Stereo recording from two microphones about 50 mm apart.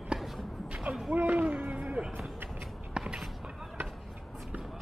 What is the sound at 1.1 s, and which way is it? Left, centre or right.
Music, right.